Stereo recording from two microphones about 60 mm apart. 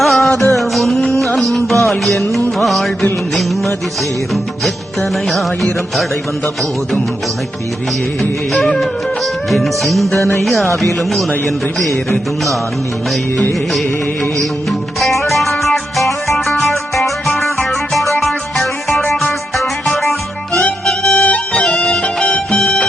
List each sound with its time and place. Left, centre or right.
0.0 s music: centre
4.6 s music: centre
9.5 s music: centre
14.7 s music: centre
20.8 s music: centre